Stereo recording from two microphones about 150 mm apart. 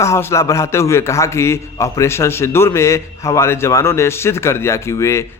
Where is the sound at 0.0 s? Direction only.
20° left (ahead or behind).